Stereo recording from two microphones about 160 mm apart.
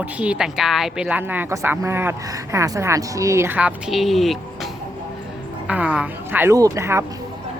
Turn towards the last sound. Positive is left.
turn(degrees=-15)  # may be behind; listen again after turning